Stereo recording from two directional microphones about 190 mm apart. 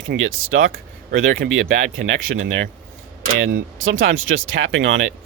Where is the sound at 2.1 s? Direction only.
70° right (ahead or behind).